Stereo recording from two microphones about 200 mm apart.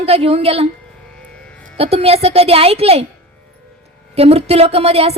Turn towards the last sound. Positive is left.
turn(degrees=-30)  # may be behind; listen again after turning